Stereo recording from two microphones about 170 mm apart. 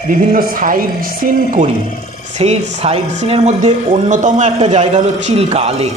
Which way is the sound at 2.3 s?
40° right (ahead or behind).